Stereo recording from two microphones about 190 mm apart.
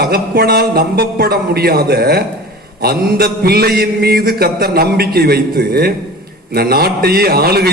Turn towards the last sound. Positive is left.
turn(degrees=-55)  # may be behind; listen again after turning